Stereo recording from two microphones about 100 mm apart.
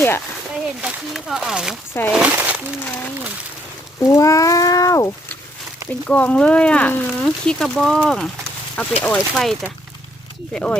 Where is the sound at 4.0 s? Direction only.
35° left (ahead or behind).